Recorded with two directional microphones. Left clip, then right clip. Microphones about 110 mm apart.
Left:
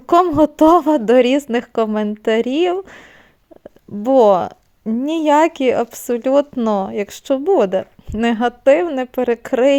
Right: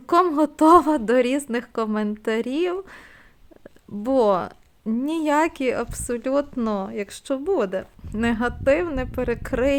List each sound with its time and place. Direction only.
0.0 s speech: 35° left (ahead or behind)